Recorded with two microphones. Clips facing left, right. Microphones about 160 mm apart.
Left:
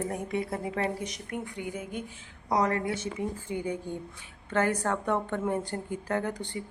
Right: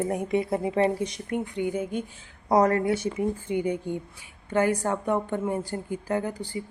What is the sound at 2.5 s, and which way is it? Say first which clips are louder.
Speech: right 6 dB; 40° right (ahead or behind).